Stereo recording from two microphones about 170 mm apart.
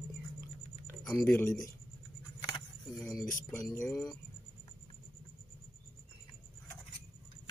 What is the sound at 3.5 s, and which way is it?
Speech, 10° left (ahead or behind).